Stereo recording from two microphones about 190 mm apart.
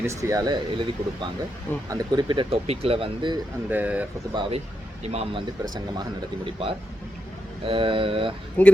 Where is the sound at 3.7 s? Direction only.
10° right (ahead or behind).